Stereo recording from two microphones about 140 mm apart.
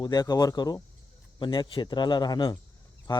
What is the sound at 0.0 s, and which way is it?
Speech, 30° left (ahead or behind).